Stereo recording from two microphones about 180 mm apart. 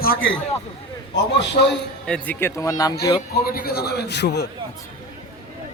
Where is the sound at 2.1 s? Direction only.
5° left (ahead or behind).